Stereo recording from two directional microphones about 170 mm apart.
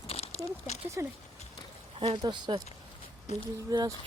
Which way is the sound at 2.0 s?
30° right (ahead or behind).